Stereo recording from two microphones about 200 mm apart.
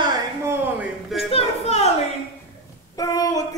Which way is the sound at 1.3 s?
30° left (ahead or behind).